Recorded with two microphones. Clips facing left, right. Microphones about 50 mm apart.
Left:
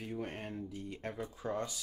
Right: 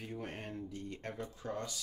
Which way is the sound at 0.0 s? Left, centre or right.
Centre.